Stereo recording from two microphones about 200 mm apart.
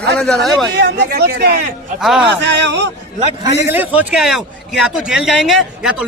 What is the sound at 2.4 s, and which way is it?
Speech, 60° right (ahead or behind).